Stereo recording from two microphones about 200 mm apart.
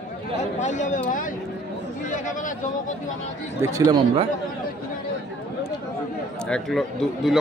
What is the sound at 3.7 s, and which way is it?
Speech, 25° right (ahead or behind).